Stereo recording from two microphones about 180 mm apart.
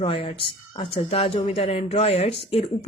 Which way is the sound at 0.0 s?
30° left (ahead or behind).